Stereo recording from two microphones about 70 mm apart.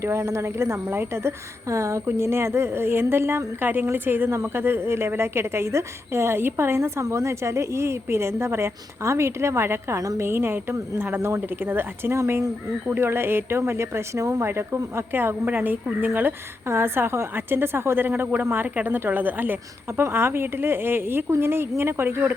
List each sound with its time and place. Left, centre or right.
0.0 s a woman's voice: right
12.1 s a woman's voice: right